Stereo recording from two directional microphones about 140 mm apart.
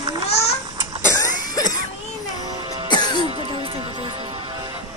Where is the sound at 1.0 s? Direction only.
20° left (ahead or behind).